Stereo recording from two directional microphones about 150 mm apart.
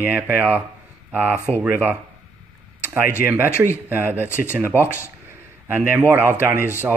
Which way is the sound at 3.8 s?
10° right (ahead or behind).